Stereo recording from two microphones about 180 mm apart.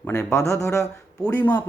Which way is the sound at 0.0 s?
10° left (ahead or behind).